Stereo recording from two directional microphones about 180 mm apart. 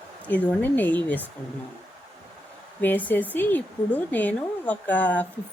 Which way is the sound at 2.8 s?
10° left (ahead or behind).